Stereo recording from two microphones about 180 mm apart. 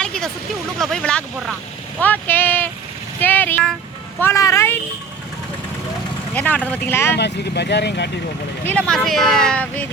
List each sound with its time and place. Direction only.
0.0 s a sound: 5° left (ahead or behind)
0.8 s speech: 5° left (ahead or behind)
3.2 s vehicle: 10° left (ahead or behind)
4.2 s speech: 15° left (ahead or behind)
6.3 s speech: 10° left (ahead or behind)
7.2 s speech: 70° left (ahead or behind)
8.7 s speech: centre (ahead or behind)